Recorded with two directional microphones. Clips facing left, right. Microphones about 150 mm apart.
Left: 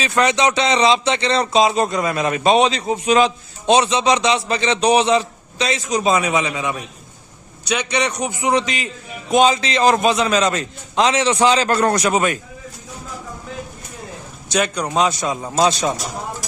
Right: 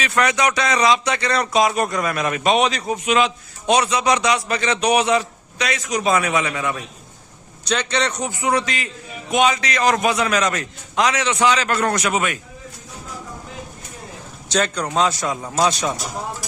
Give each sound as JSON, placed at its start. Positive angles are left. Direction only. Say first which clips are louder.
{"t": 0.0, "sound": "a man's voice", "louder": "left 2 dB", "side_deg": 25}
{"t": 9.3, "sound": "speech", "louder": "left 3 dB", "side_deg": 30}
{"t": 14.5, "sound": "speech", "louder": "left 1 dB", "side_deg": 15}